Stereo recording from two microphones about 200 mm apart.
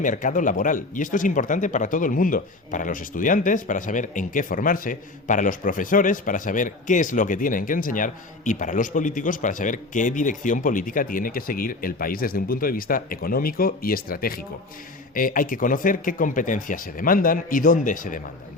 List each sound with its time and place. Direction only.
0.0 s speech: 40° left (ahead or behind)